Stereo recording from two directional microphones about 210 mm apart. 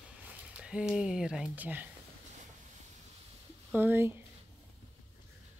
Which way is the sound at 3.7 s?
10° right (ahead or behind).